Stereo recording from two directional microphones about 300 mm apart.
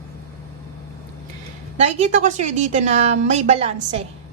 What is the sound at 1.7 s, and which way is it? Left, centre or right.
A woman's voice, right.